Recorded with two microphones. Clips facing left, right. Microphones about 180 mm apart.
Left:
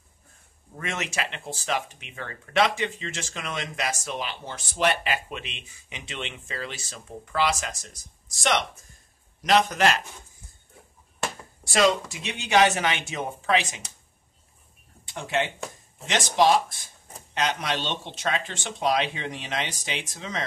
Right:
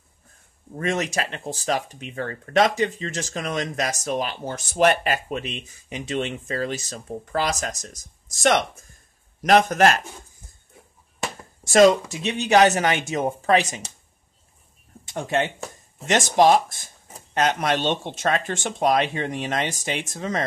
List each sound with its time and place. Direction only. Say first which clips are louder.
0.7 s speech: right 7 dB; 35° right (ahead or behind)
11.6 s speech: right 7 dB; 45° right (ahead or behind)
15.0 s speech: right 4 dB; 45° right (ahead or behind)